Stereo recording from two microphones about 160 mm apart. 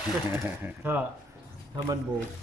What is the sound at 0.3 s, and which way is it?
Speech, 15° right (ahead or behind).